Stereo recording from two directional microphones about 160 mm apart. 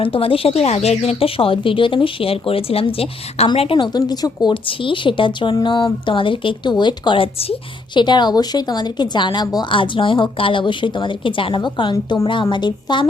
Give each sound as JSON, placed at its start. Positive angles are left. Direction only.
{"t": 0.0, "sound": "a woman's voice", "side_deg": 35}